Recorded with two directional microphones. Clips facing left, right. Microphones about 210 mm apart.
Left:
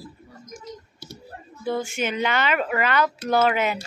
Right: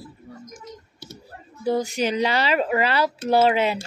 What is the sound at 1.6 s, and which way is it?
Speech, 40° right (ahead or behind).